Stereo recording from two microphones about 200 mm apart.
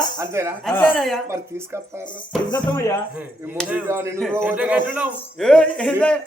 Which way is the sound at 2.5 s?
15° left (ahead or behind).